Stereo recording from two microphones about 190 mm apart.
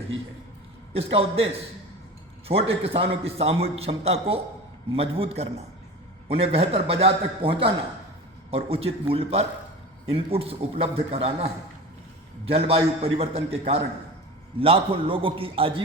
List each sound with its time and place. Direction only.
0.9 s a man's voice: 30° right (ahead or behind)
2.5 s a man's voice: 30° right (ahead or behind)